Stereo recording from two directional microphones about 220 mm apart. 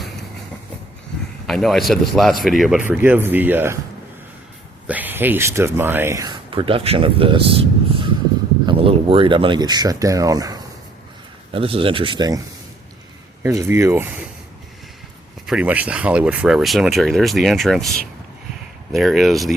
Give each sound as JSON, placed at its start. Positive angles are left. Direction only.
{"t": 1.5, "sound": "speech", "side_deg": 0}
{"t": 4.9, "sound": "speech", "side_deg": -10}
{"t": 8.6, "sound": "speech", "side_deg": -25}
{"t": 13.4, "sound": "speech", "side_deg": -10}
{"t": 15.4, "sound": "speech", "side_deg": -5}
{"t": 18.9, "sound": "speech", "side_deg": 0}